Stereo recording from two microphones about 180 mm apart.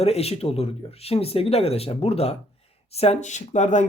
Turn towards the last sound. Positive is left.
turn(degrees=40)  # may be behind; listen again after turning